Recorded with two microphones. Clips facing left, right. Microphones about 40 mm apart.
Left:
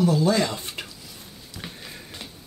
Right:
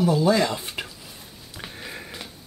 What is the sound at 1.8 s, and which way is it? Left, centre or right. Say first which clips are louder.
Music: right 4 dB; right.